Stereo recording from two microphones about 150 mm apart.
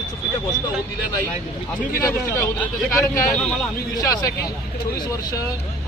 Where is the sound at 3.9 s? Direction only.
25° left (ahead or behind).